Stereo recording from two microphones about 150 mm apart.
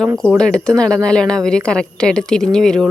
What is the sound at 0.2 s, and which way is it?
Speech, 5° left (ahead or behind).